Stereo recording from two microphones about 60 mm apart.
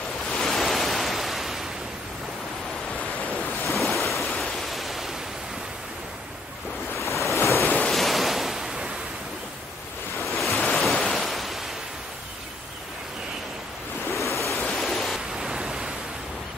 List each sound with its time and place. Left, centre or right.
0.3 s waves: centre
3.3 s waves: centre
4.1 s pink noise: centre
7.0 s waves: left
7.9 s waves: centre
10.3 s waves: centre
14.1 s waves: left
14.6 s a sound: centre
15.3 s a sound: centre